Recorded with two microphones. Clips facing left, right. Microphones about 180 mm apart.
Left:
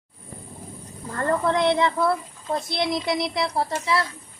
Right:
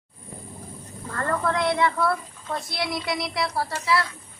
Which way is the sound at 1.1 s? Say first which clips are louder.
Left 3 dB; 20° left (ahead or behind).